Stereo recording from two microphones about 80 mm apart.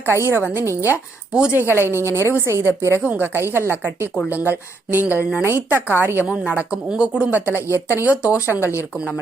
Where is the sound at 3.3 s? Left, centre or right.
Right.